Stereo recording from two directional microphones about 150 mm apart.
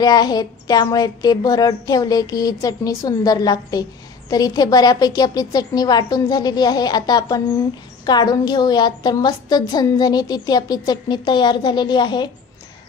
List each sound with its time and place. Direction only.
0.0 s a woman's voice: 25° left (ahead or behind)